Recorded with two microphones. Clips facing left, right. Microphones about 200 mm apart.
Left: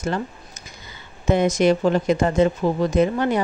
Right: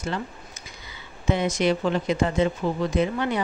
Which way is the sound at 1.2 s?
45° left (ahead or behind).